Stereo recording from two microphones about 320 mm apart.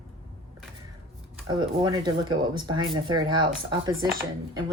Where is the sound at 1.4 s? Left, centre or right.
Centre.